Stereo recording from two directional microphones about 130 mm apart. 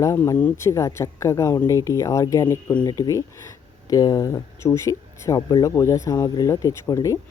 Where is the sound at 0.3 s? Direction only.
15° left (ahead or behind).